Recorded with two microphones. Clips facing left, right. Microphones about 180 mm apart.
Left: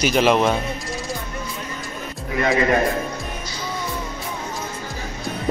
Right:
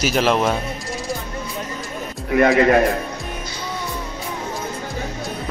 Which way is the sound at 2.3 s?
55° right (ahead or behind).